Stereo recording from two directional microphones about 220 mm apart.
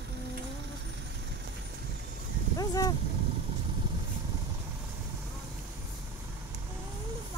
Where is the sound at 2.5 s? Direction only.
15° left (ahead or behind).